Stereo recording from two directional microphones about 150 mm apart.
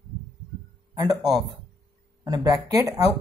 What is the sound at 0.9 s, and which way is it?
Speech, 25° right (ahead or behind).